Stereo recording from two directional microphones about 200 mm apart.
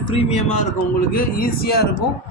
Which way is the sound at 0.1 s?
30° left (ahead or behind).